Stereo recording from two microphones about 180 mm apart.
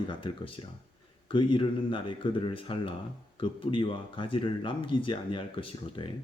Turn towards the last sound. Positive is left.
turn(degrees=30)  # may be behind; listen again after turning